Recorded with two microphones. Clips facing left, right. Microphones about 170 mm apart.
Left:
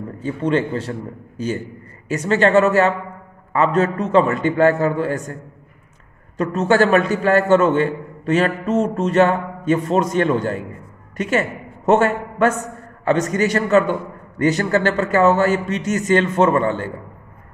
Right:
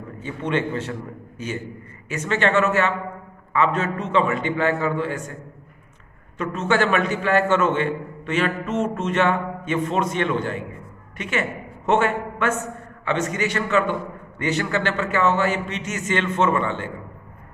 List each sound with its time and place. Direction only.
0.2 s a man's voice: 35° left (ahead or behind)